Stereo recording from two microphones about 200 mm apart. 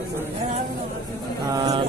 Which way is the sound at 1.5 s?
20° right (ahead or behind).